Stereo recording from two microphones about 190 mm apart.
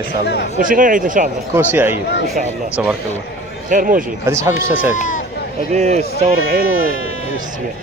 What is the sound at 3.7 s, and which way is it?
Speech, 45° right (ahead or behind).